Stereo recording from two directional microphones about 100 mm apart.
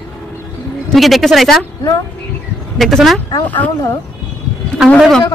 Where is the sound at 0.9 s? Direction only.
Centre (ahead or behind).